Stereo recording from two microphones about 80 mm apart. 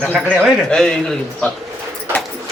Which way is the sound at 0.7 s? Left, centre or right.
Centre.